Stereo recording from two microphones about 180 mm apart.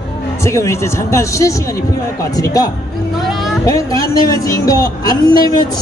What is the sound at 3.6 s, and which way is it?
Speech, 20° left (ahead or behind).